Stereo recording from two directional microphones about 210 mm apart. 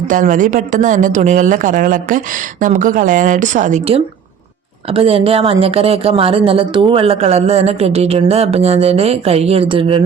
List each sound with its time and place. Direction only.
0.1 s speech: 40° right (ahead or behind)